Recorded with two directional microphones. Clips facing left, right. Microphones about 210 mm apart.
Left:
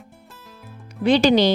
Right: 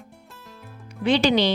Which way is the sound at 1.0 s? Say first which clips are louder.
Left 4 dB; 40° left (ahead or behind).